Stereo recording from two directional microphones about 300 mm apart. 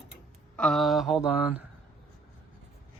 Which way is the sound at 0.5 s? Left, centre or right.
Centre.